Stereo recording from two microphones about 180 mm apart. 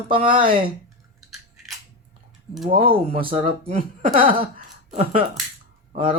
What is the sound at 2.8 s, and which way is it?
Speech, 30° right (ahead or behind).